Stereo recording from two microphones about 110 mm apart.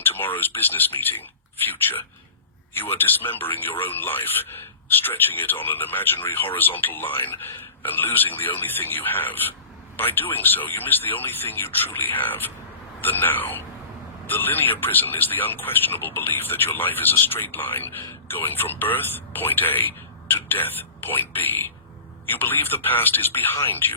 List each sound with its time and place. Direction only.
0.2 s speech: 20° left (ahead or behind)
1.9 s speech: 40° left (ahead or behind)
2.7 s speech: 20° left (ahead or behind)